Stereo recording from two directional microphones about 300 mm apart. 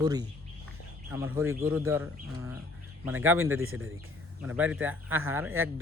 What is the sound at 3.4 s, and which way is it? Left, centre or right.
Speech, right.